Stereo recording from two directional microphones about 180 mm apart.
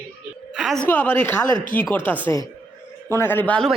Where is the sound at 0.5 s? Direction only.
5° right (ahead or behind).